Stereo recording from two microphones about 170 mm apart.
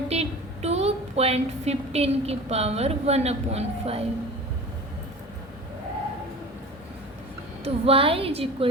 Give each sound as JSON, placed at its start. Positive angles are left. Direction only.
{"t": 0.1, "sound": "a woman's voice", "side_deg": -40}
{"t": 7.6, "sound": "a woman's voice", "side_deg": -35}